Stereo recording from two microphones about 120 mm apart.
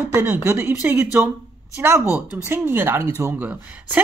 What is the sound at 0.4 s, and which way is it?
Speech, 20° right (ahead or behind).